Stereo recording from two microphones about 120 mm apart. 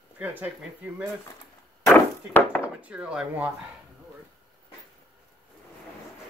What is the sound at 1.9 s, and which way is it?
Chop, 15° left (ahead or behind).